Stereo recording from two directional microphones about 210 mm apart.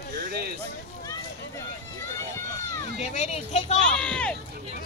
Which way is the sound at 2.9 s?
30° left (ahead or behind).